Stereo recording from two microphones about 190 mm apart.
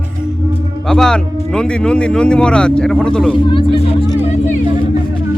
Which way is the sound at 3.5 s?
25° left (ahead or behind).